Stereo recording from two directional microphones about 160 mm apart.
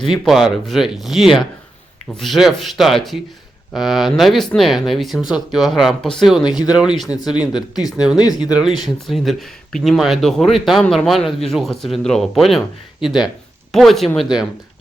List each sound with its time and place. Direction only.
0.1 s speech: centre (ahead or behind)
7.1 s speech: 25° left (ahead or behind)
8.4 s speech: 5° right (ahead or behind)